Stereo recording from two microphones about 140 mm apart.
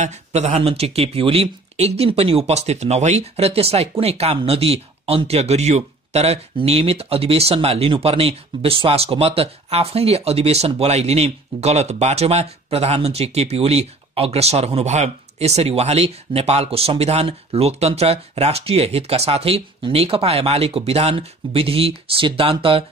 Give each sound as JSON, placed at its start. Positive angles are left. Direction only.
{"t": 0.0, "sound": "speech", "side_deg": -50}